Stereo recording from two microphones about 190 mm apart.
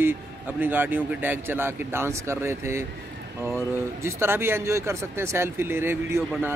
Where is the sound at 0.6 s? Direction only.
10° right (ahead or behind).